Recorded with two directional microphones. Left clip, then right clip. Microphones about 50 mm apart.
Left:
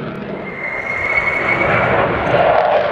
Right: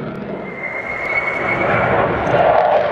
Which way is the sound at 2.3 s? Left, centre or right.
Centre.